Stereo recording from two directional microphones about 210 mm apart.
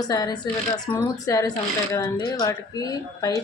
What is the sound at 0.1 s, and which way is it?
Speech, 20° left (ahead or behind).